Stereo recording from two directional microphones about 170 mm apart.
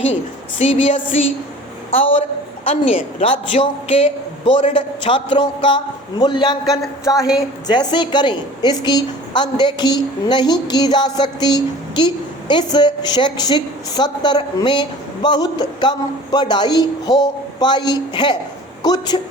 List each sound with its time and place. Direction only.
0.6 s a woman's voice: 35° left (ahead or behind)